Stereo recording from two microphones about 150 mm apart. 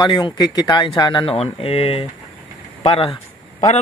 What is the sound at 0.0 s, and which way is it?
Speech, 30° left (ahead or behind).